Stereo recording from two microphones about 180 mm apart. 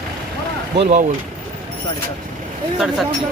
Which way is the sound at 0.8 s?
40° right (ahead or behind).